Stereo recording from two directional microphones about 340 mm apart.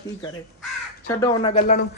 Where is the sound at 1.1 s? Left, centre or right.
Centre.